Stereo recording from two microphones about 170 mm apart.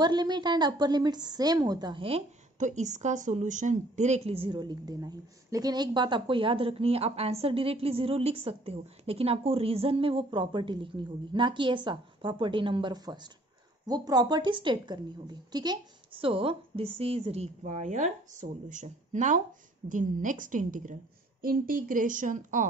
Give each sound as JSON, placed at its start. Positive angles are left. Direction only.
{"t": 0.0, "sound": "a woman's voice", "side_deg": -25}